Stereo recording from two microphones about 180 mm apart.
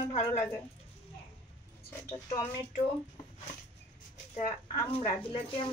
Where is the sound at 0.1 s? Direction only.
35° left (ahead or behind).